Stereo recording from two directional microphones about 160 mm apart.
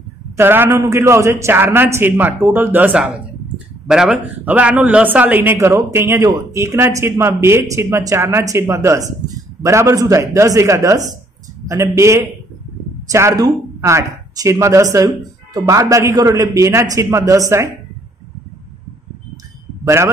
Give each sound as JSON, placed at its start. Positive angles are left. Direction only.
{"t": 0.4, "sound": "a man's voice", "side_deg": -15}
{"t": 19.8, "sound": "speech", "side_deg": -15}